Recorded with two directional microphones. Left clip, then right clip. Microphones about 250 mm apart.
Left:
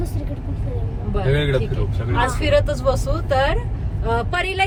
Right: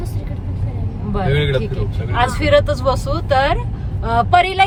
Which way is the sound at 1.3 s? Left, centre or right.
Left.